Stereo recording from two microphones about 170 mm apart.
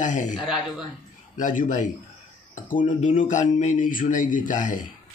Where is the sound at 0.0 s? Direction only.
45° left (ahead or behind).